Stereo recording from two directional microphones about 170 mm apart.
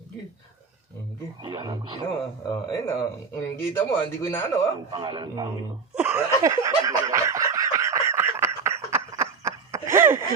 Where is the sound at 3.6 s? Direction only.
15° left (ahead or behind).